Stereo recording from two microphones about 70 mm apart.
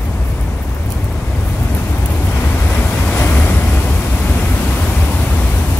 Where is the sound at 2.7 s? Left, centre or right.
Left.